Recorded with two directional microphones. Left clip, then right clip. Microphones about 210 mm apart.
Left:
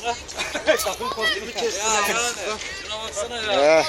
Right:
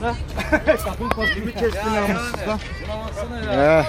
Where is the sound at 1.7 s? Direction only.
15° left (ahead or behind).